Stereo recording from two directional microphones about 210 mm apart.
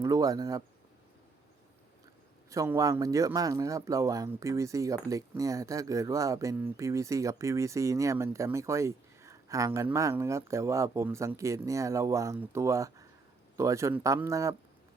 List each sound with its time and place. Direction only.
0.0 s a man's voice: 15° right (ahead or behind)
2.5 s a man's voice: 15° right (ahead or behind)